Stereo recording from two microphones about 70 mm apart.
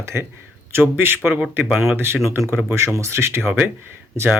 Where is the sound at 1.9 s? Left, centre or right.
Right.